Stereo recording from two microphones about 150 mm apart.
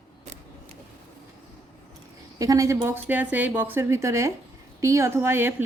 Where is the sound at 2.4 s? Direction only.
20° right (ahead or behind).